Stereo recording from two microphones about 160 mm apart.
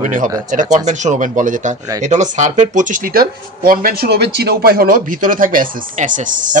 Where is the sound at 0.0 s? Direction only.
55° right (ahead or behind).